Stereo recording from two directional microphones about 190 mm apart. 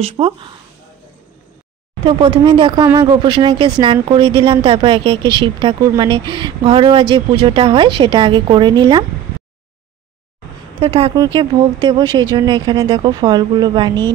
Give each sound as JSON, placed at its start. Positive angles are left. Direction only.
{"t": 0.0, "sound": "speech", "side_deg": -30}
{"t": 2.0, "sound": "a woman's voice", "side_deg": -25}
{"t": 10.8, "sound": "a woman's voice", "side_deg": -30}